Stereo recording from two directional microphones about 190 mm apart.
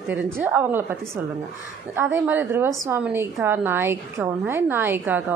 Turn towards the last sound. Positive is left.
turn(degrees=-10)  # may be behind; listen again after turning